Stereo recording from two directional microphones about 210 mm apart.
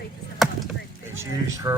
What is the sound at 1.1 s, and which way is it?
Speech, 10° right (ahead or behind).